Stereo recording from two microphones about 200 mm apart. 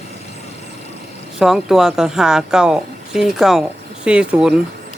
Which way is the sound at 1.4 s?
Centre (ahead or behind).